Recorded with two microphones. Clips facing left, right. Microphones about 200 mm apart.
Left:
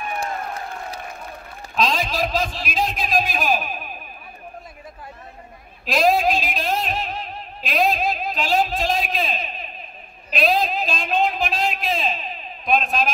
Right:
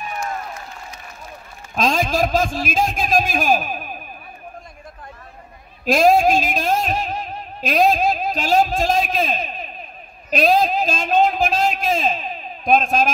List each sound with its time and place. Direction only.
1.8 s a man's voice: 45° right (ahead or behind)
5.9 s a man's voice: 45° right (ahead or behind)